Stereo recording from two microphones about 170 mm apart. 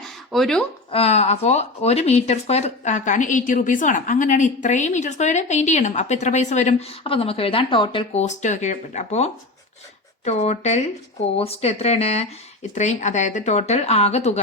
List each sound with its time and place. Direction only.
0.3 s speech: centre (ahead or behind)
0.9 s speech: 35° left (ahead or behind)